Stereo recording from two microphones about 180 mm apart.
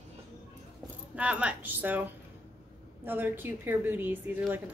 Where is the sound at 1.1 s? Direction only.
5° right (ahead or behind).